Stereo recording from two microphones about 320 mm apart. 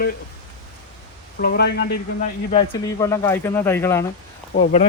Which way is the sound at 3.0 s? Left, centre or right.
Centre.